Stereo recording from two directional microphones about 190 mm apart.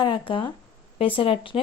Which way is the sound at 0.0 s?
25° left (ahead or behind).